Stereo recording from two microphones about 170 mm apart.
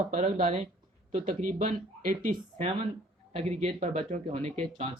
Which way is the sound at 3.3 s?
40° right (ahead or behind).